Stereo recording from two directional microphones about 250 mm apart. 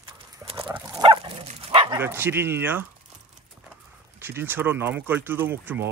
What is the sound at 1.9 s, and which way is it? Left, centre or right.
Speech, centre.